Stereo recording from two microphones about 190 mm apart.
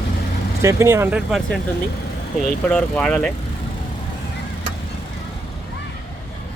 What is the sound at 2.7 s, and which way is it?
Speech, 5° left (ahead or behind).